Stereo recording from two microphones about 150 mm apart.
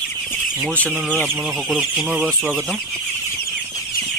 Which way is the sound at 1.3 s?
5° right (ahead or behind).